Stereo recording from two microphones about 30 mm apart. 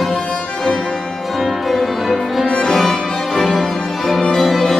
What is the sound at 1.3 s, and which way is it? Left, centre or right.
Music, centre.